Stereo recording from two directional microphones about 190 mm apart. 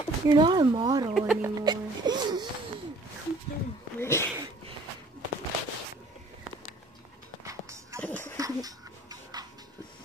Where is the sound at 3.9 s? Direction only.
15° left (ahead or behind).